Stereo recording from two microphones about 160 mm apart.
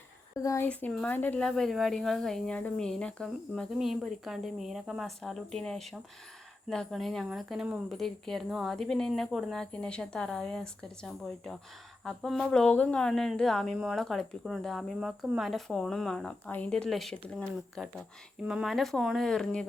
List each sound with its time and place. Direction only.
0.3 s speech: 20° left (ahead or behind)
0.7 s speech: 5° left (ahead or behind)